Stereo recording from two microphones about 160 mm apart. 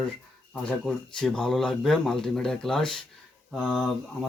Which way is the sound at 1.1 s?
5° left (ahead or behind).